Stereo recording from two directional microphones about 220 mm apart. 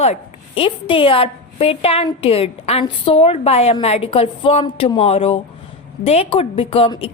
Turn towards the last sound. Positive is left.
turn(degrees=25)  # may be behind; listen again after turning